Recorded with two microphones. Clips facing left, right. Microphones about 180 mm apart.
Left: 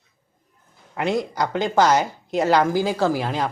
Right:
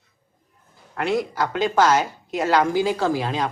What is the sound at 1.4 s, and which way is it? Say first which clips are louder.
A woman's voice: left 1 dB; 15° left (ahead or behind).